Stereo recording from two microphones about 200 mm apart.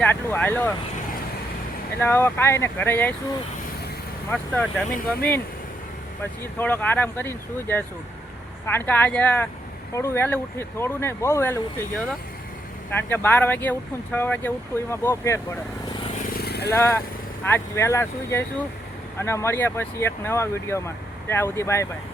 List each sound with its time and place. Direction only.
0.0 s speech: 5° left (ahead or behind)
2.0 s speech: 10° left (ahead or behind)
4.3 s speech: 5° left (ahead or behind)
6.6 s speech: 10° left (ahead or behind)
16.1 s vehicle: 50° left (ahead or behind)
16.7 s speech: 10° left (ahead or behind)